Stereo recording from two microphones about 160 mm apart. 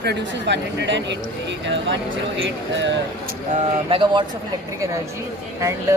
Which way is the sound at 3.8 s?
35° right (ahead or behind).